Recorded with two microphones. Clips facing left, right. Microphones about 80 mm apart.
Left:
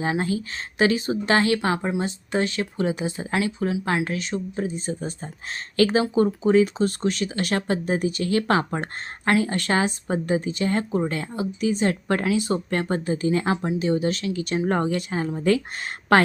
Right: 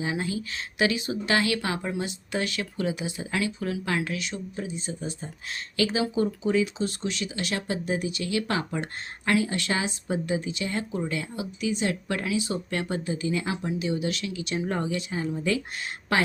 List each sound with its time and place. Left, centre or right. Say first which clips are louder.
0.0 s a woman's voice: left 5 dB; left